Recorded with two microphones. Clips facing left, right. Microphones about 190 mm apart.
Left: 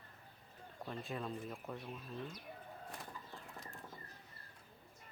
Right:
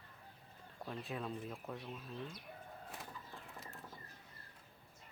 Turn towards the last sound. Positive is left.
turn(degrees=0)  # may be behind; listen again after turning